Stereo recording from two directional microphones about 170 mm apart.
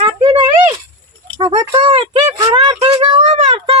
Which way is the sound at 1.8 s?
30° right (ahead or behind).